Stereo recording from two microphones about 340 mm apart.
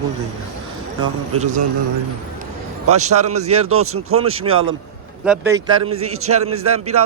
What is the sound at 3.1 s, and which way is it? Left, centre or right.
Speech, right.